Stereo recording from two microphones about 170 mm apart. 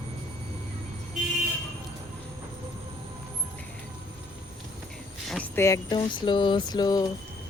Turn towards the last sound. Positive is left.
turn(degrees=25)  # may be behind; listen again after turning